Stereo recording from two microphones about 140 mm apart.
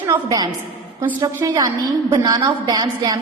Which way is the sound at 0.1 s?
25° right (ahead or behind).